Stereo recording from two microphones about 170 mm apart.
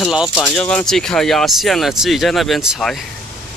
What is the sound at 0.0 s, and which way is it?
Speech, centre (ahead or behind).